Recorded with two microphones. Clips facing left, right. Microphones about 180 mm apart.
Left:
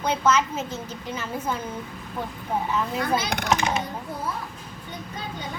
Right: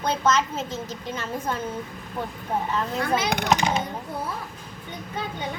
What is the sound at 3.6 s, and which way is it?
Speech, 35° right (ahead or behind).